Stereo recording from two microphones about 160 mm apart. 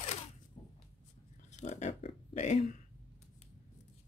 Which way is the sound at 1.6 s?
45° left (ahead or behind).